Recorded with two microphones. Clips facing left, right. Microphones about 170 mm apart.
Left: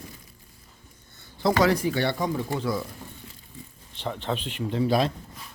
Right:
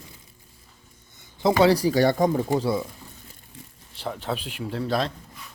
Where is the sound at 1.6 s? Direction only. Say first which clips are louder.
Right 7 dB; 35° right (ahead or behind).